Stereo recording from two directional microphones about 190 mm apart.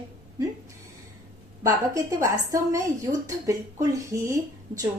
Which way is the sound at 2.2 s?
15° right (ahead or behind).